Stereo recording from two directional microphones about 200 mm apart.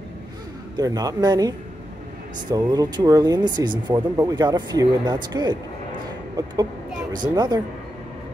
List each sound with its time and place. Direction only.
0.7 s speech: 20° right (ahead or behind)
2.5 s speech: 20° right (ahead or behind)